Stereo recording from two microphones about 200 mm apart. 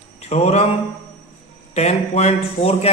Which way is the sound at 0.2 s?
30° left (ahead or behind).